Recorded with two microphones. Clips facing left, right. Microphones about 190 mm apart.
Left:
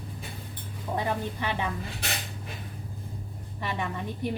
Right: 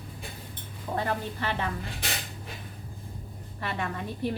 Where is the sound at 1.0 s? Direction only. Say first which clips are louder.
Even; 15° left (ahead or behind).